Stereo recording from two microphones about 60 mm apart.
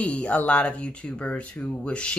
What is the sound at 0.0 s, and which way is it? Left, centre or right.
Speech, left.